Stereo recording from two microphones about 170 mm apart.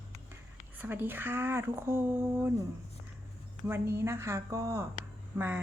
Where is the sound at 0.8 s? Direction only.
10° right (ahead or behind).